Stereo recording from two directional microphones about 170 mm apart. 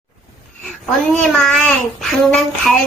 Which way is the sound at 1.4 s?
5° left (ahead or behind).